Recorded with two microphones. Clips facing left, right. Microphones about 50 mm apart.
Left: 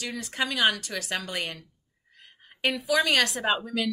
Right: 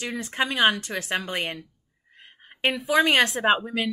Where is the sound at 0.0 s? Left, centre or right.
Right.